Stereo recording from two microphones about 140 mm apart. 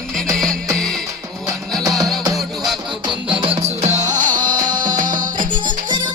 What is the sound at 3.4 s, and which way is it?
Music, 45° right (ahead or behind).